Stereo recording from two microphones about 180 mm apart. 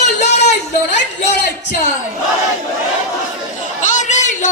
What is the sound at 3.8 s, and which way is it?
Chatter, 45° left (ahead or behind).